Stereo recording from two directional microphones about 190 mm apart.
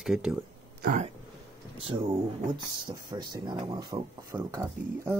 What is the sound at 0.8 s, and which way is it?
Speech, 45° right (ahead or behind).